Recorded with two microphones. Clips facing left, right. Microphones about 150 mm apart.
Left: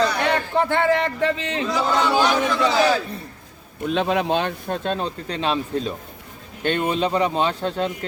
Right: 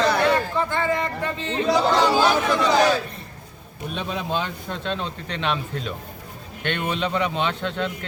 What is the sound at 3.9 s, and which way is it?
Speech, 90° left.